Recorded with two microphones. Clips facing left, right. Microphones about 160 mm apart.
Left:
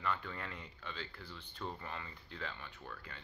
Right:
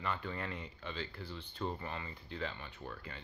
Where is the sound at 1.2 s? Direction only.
25° right (ahead or behind).